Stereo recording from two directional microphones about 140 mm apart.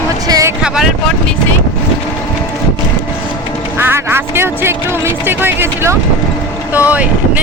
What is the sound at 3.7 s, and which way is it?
Speech, 15° right (ahead or behind).